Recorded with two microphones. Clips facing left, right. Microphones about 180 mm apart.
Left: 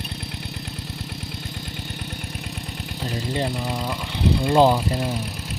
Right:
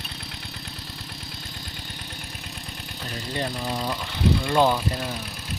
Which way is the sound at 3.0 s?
20° left (ahead or behind).